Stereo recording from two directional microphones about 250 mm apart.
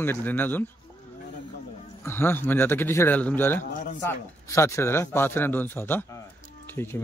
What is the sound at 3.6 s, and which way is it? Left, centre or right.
Speech, left.